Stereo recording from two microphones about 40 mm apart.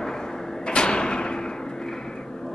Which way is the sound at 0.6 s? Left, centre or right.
Left.